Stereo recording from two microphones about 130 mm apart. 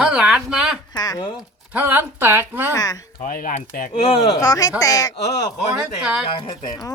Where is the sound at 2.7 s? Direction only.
30° left (ahead or behind).